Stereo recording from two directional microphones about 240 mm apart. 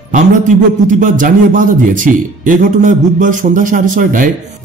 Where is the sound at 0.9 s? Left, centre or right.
Right.